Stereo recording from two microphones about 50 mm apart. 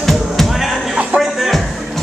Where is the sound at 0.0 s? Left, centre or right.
Centre.